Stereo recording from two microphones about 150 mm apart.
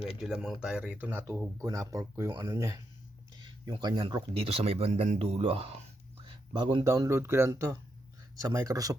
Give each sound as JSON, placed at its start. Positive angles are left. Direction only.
{"t": 0.2, "sound": "speech", "side_deg": 0}
{"t": 5.4, "sound": "speech", "side_deg": -40}
{"t": 6.8, "sound": "speech", "side_deg": -20}